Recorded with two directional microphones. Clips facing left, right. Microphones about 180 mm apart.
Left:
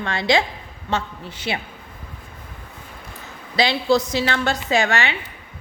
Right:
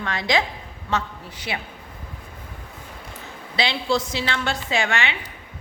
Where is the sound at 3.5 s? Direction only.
40° left (ahead or behind).